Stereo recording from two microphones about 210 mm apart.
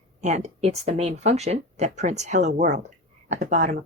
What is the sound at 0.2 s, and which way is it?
Speech, 35° right (ahead or behind).